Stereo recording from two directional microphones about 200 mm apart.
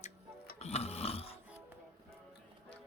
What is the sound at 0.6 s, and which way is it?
Snoring, 30° left (ahead or behind).